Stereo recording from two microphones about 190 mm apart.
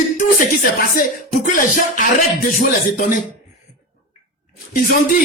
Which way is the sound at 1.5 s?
45° left (ahead or behind).